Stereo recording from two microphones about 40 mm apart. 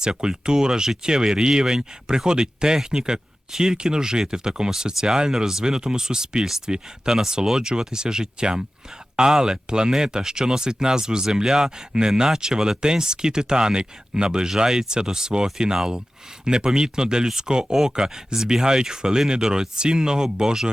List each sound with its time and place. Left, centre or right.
0.0 s speech: centre